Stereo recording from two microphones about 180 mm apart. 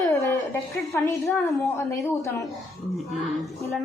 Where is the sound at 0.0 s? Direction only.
15° left (ahead or behind).